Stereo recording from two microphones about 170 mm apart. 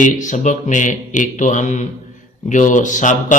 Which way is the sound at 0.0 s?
45° left (ahead or behind).